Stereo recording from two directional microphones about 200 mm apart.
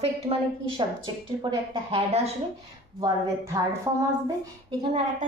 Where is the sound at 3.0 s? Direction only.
15° right (ahead or behind).